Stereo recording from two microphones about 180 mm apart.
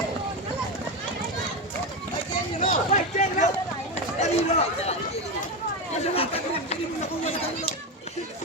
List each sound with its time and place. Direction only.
2.6 s a sound: 40° left (ahead or behind)
4.2 s run: 35° left (ahead or behind)
6.0 s chatter: 35° left (ahead or behind)